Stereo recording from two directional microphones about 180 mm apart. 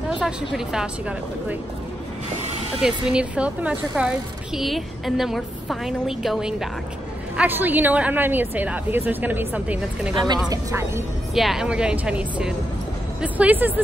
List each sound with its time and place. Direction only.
0.2 s a woman's voice: 5° right (ahead or behind)
2.8 s a woman's voice: 5° right (ahead or behind)
10.1 s a woman's voice: 25° right (ahead or behind)
11.3 s a woman's voice: centre (ahead or behind)